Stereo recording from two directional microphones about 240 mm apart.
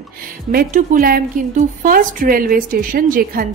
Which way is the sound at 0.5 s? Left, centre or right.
Right.